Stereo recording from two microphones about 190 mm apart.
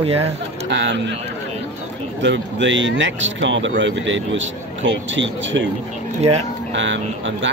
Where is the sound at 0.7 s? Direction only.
70° right (ahead or behind).